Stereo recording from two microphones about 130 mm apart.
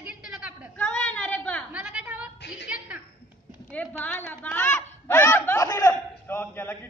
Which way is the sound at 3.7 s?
10° left (ahead or behind).